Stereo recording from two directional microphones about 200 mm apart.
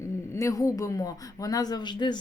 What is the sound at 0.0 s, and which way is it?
A woman's voice, 15° left (ahead or behind).